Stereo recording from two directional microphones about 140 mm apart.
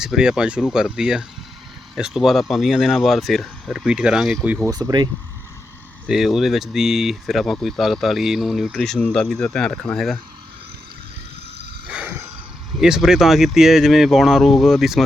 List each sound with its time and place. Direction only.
0.0 s speech: 5° right (ahead or behind)
4.6 s speech: 25° right (ahead or behind)
6.1 s speech: centre (ahead or behind)
11.9 s a sound: 10° right (ahead or behind)
12.8 s speech: 5° right (ahead or behind)